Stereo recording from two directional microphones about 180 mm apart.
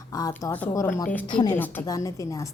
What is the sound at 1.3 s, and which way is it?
Speech, 25° left (ahead or behind).